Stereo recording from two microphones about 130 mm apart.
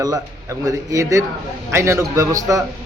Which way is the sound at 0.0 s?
30° right (ahead or behind).